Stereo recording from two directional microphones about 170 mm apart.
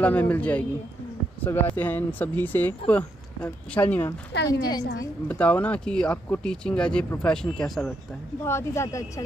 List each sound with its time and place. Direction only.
0.0 s speech: 10° left (ahead or behind)
4.5 s a woman's voice: 25° left (ahead or behind)
5.3 s speech: 10° left (ahead or behind)
8.5 s speech: 15° left (ahead or behind)